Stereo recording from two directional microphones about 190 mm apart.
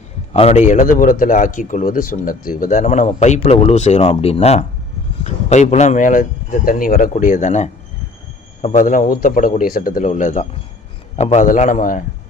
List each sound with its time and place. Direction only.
0.3 s a man's voice: 35° left (ahead or behind)
0.7 s speech: 45° left (ahead or behind)